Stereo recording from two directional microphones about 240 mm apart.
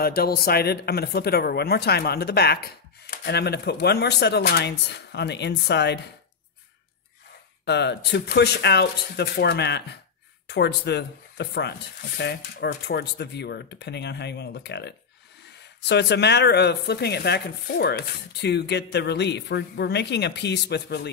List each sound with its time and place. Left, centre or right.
0.0 s a man's voice: left
7.6 s speech: left